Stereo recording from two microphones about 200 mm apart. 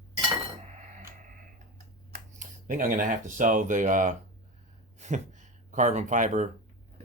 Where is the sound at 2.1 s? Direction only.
40° right (ahead or behind).